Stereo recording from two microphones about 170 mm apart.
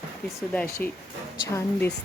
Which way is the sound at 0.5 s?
10° left (ahead or behind).